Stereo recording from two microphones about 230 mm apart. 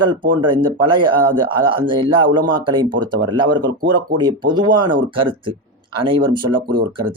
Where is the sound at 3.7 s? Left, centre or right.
Right.